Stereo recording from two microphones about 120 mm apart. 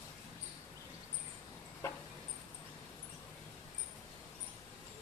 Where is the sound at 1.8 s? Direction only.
25° left (ahead or behind).